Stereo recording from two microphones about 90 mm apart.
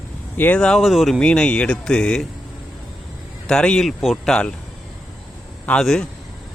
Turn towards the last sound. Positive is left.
turn(degrees=5)  # may be behind; listen again after turning